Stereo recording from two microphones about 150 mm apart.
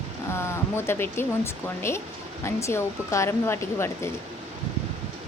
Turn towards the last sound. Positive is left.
turn(degrees=15)  # may be behind; listen again after turning